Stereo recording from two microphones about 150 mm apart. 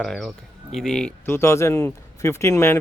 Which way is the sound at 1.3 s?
15° left (ahead or behind).